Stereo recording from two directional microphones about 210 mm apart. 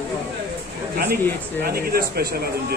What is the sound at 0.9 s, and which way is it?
Speech, 45° right (ahead or behind).